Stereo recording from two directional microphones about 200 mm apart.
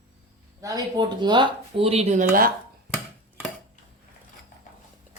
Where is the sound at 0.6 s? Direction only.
15° right (ahead or behind); by 2.5 s 45° right (ahead or behind).